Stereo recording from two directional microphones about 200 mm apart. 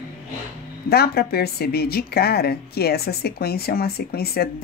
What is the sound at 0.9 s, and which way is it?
Speech, 50° left (ahead or behind).